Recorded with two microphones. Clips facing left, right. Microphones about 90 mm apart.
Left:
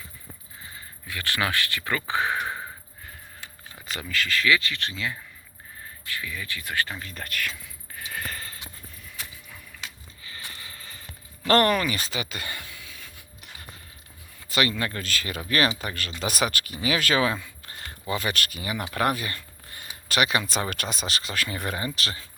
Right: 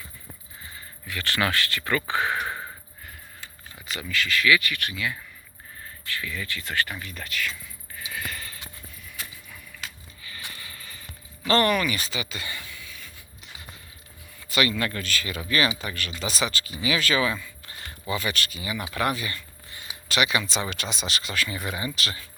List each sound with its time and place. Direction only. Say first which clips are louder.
1.0 s speech: right 1 dB; 20° left (ahead or behind)
3.8 s speech: right 1 dB; 40° left (ahead or behind)
5.8 s speech: right 1 dB; 20° left (ahead or behind)
7.0 s speech: even; 40° left (ahead or behind)
7.9 s a sound: even; 50° left (ahead or behind)
10.5 s mechanisms: even; 30° left (ahead or behind)
11.4 s a sound: left 1 dB; 45° left (ahead or behind)
14.5 s speech: right 1 dB; 40° left (ahead or behind)
16.2 s speech: left 2 dB; 55° left (ahead or behind)
16.8 s speech: left 1 dB; 45° left (ahead or behind)
21.8 s speech: even; 40° left (ahead or behind)